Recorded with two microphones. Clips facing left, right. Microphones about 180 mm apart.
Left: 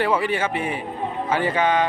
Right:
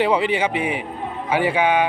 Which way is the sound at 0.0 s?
15° right (ahead or behind).